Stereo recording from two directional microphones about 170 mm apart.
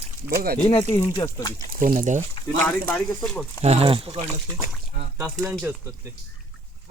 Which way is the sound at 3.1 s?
Centre (ahead or behind).